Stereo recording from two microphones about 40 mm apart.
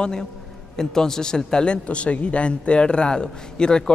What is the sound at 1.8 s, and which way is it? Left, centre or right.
Speech, left.